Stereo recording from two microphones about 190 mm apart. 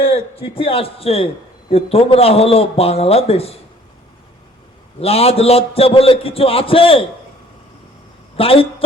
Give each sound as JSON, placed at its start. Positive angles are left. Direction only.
{"t": 0.0, "sound": "a man's voice", "side_deg": 30}
{"t": 4.9, "sound": "a man's voice", "side_deg": 30}
{"t": 8.4, "sound": "a woman's voice", "side_deg": 30}